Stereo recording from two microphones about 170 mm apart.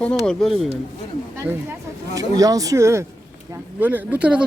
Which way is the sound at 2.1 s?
20° right (ahead or behind).